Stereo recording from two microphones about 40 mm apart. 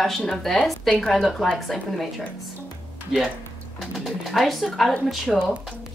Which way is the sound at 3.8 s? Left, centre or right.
Centre.